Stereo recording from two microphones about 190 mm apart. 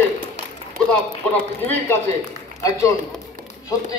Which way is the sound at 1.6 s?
10° left (ahead or behind).